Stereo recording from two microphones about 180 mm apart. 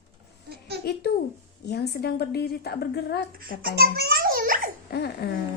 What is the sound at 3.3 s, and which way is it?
Babbling, 60° right (ahead or behind).